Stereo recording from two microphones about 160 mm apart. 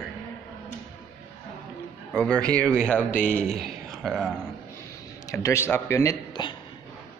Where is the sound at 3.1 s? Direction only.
55° left (ahead or behind).